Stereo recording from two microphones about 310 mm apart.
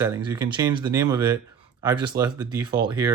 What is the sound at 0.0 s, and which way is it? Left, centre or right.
Speech, centre.